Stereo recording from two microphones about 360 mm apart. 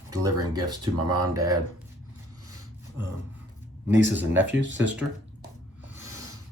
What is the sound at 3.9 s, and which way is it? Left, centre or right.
Speech, right.